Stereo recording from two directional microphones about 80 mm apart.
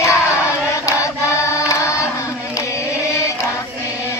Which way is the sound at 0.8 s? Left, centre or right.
Left.